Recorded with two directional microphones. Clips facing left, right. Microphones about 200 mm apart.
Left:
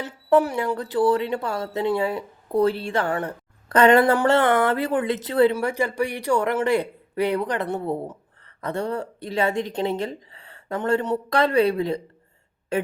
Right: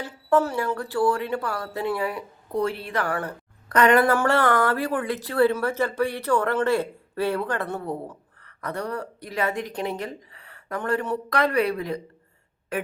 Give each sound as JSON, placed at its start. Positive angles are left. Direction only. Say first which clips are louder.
{"t": 0.0, "sound": "speech", "louder": "left 3 dB", "side_deg": 15}